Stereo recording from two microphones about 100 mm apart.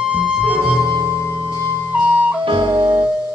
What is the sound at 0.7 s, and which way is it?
Music, 45° right (ahead or behind).